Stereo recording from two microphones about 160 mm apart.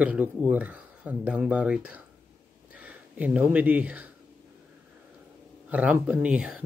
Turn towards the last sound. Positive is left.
turn(degrees=-5)  # may be behind; listen again after turning